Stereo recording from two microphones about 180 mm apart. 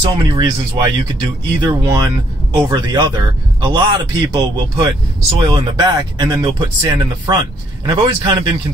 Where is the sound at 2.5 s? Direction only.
25° right (ahead or behind).